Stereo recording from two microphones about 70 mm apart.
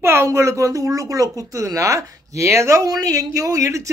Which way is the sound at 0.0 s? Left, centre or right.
Right.